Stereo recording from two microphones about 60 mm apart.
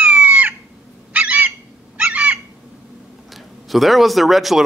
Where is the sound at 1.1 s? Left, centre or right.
Right.